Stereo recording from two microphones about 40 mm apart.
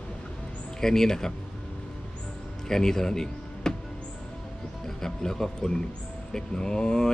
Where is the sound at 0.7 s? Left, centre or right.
Centre.